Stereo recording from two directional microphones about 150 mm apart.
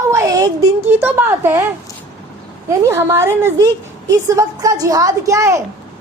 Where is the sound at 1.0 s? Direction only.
15° right (ahead or behind).